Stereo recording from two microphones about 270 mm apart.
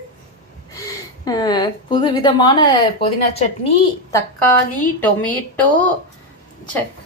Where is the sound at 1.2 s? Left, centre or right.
Centre.